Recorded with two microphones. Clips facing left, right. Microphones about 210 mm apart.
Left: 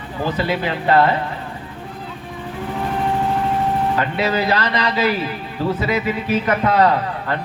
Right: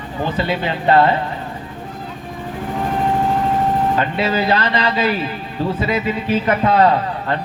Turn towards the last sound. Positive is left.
turn(degrees=-25)  # may be behind; listen again after turning